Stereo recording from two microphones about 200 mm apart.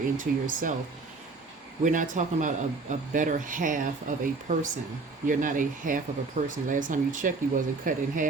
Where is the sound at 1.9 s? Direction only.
40° right (ahead or behind).